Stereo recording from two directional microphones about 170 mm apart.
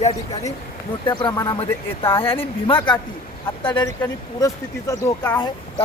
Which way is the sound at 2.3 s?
30° left (ahead or behind).